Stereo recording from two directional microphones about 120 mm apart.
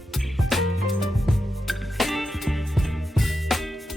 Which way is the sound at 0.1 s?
Centre (ahead or behind).